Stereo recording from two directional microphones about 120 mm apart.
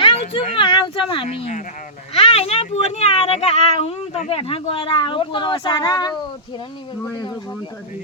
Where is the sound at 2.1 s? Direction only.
55° left (ahead or behind); by 6.1 s 35° left (ahead or behind).